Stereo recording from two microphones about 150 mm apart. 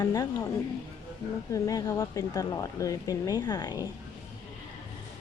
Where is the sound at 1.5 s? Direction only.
25° left (ahead or behind).